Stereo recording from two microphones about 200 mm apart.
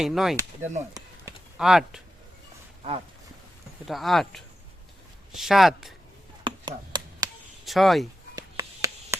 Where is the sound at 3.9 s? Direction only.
Centre (ahead or behind).